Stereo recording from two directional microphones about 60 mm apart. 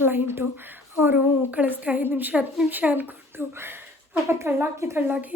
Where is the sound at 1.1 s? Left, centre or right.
Right.